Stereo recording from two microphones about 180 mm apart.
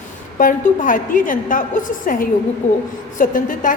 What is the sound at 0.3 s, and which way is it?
A woman's voice, 50° left (ahead or behind).